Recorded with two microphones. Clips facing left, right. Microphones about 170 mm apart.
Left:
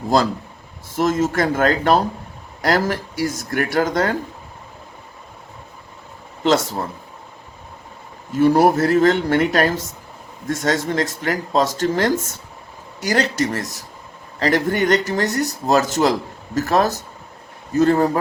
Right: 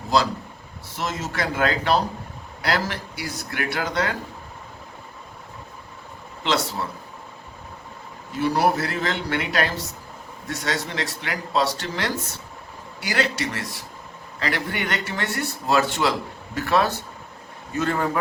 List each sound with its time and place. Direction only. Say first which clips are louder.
0.9 s speech: left 10 dB; 50° left (ahead or behind)
6.4 s speech: left 6 dB; 45° left (ahead or behind)
8.3 s speech: left 7 dB; 50° left (ahead or behind)